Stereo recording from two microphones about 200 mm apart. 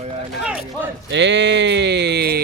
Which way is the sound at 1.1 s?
60° right (ahead or behind).